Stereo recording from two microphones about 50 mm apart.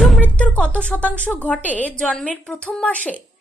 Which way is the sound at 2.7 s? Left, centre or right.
Left.